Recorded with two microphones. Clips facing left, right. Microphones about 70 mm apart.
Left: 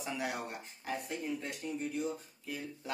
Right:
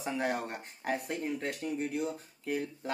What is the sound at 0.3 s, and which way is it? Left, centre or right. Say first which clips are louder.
Speech: right 5 dB; right.